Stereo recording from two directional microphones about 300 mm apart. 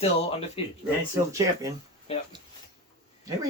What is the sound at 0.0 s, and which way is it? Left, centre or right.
Speech, centre.